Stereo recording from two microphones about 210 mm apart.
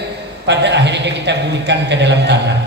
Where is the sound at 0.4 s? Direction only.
55° right (ahead or behind).